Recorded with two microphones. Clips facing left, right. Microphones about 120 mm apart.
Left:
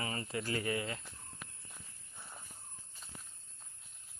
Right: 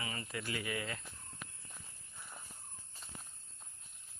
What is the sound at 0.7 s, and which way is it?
Speech, 25° left (ahead or behind).